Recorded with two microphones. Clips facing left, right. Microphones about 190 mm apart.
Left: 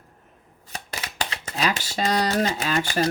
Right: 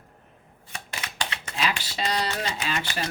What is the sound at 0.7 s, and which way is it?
Speech, 35° left (ahead or behind).